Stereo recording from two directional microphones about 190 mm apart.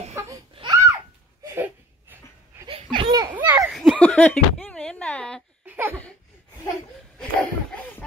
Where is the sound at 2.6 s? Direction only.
25° right (ahead or behind).